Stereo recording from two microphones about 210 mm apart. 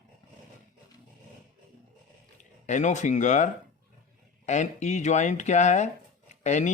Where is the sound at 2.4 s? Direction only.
35° left (ahead or behind).